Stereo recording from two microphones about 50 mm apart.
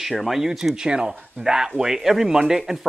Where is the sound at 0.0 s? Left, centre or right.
Centre.